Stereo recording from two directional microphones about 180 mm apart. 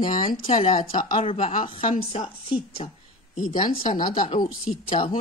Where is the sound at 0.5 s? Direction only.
35° left (ahead or behind).